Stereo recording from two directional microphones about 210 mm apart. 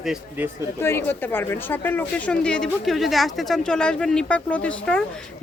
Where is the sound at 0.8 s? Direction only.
10° left (ahead or behind).